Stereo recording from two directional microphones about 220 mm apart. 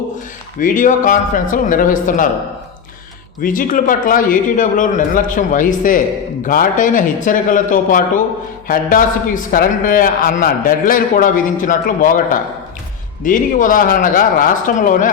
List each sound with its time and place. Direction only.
0.6 s a man's voice: 35° left (ahead or behind)
3.4 s a man's voice: 40° left (ahead or behind)